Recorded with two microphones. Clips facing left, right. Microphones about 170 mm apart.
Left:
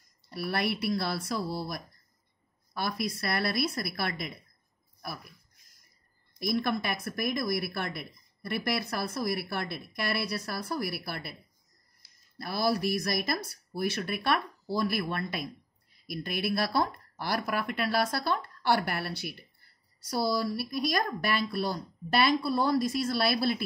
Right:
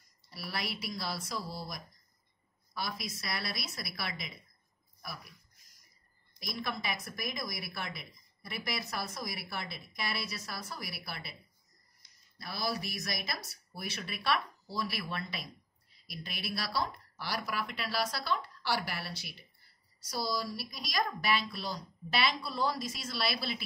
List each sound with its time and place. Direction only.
0.3 s a woman's voice: 60° left (ahead or behind)
6.4 s a woman's voice: 60° left (ahead or behind)
12.0 s a sound: 5° left (ahead or behind)
12.4 s a woman's voice: 55° left (ahead or behind)